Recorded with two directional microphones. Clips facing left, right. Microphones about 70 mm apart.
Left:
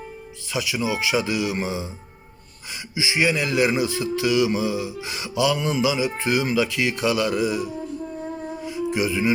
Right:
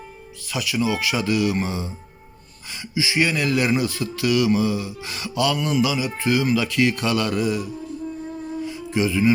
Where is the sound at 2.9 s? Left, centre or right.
Centre.